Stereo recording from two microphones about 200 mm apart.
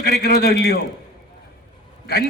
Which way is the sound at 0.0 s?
50° left (ahead or behind).